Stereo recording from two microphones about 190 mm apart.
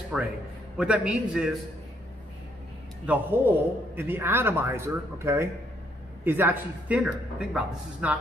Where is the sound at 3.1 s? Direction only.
5° right (ahead or behind).